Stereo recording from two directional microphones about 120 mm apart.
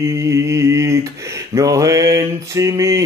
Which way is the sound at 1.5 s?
30° right (ahead or behind).